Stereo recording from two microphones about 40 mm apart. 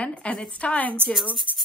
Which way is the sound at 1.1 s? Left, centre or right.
Centre.